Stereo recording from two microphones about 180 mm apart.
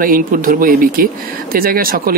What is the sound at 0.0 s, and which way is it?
Speech, 50° right (ahead or behind).